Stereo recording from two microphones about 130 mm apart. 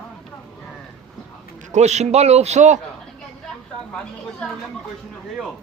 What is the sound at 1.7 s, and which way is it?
A man's voice, 60° right (ahead or behind).